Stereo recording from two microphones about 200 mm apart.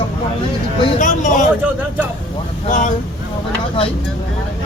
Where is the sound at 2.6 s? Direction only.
40° left (ahead or behind).